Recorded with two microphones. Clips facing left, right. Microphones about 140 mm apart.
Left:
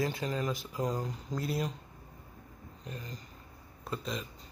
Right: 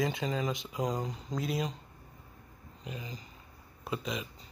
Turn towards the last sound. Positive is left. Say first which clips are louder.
# right 1 dB
turn(degrees=-5)  # may be behind; listen again after turning